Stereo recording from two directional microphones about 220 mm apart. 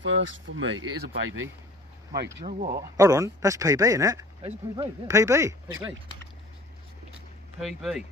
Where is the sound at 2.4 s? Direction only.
40° right (ahead or behind).